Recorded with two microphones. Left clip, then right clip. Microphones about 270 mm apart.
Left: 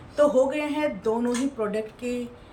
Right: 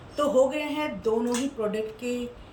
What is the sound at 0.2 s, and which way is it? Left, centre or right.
A woman's voice, centre.